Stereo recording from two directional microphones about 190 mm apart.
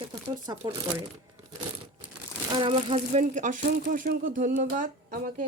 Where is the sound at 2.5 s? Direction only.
30° right (ahead or behind).